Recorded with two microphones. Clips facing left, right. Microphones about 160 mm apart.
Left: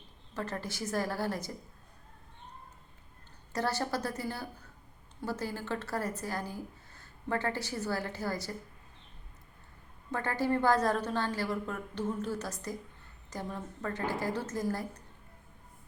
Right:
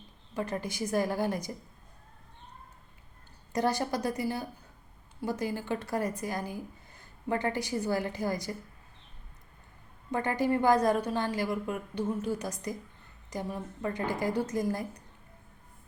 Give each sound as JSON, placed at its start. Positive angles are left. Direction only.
{"t": 0.3, "sound": "a woman's voice", "side_deg": -15}
{"t": 3.5, "sound": "a woman's voice", "side_deg": -15}
{"t": 10.1, "sound": "a woman's voice", "side_deg": -15}